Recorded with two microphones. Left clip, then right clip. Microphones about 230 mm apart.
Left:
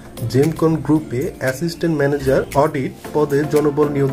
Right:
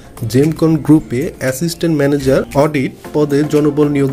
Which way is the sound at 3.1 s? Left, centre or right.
Right.